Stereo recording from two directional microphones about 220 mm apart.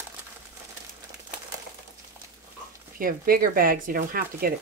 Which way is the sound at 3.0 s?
40° right (ahead or behind).